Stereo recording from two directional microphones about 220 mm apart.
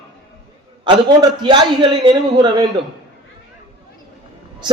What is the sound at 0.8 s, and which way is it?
A man's voice, 20° right (ahead or behind).